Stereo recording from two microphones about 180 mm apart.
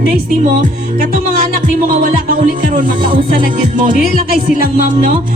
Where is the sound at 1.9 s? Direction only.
45° right (ahead or behind).